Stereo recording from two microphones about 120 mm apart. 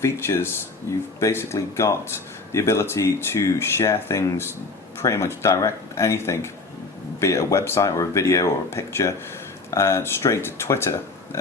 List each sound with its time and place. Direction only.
0.0 s speech: 20° left (ahead or behind)